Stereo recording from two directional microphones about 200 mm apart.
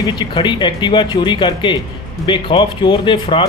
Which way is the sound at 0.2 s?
25° left (ahead or behind).